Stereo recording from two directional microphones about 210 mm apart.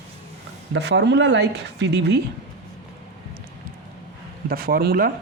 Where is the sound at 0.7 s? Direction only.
55° right (ahead or behind).